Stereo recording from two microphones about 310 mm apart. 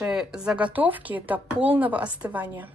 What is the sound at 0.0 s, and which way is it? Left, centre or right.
Speech, centre.